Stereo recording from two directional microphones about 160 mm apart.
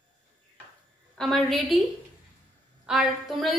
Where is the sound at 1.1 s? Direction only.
Centre (ahead or behind).